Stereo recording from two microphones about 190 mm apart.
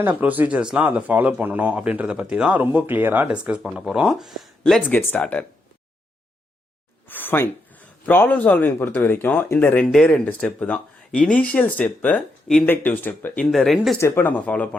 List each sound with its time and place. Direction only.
0.0 s speech: 10° right (ahead or behind); by 5.5 s 5° left (ahead or behind)
7.1 s a sound: 10° left (ahead or behind)
8.0 s speech: 10° left (ahead or behind)